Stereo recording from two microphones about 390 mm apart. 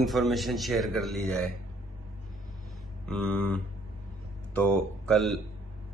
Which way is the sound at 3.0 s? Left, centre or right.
Centre.